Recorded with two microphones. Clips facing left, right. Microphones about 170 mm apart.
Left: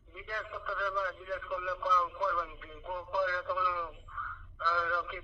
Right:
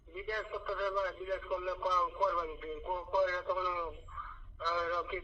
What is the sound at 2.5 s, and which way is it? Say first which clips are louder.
A man's voice: right 3 dB; 20° right (ahead or behind).